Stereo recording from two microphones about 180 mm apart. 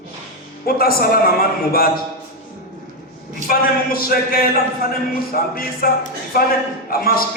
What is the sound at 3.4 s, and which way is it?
A man's voice, 55° left (ahead or behind).